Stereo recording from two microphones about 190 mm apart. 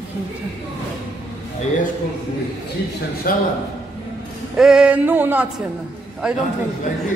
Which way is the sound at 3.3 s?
50° left (ahead or behind).